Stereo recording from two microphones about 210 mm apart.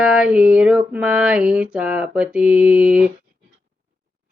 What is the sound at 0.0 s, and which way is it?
Speech, 5° right (ahead or behind).